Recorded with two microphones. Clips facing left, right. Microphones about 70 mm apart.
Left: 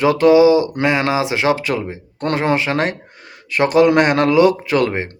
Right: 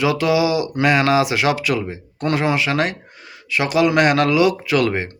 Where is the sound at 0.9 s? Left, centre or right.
Left.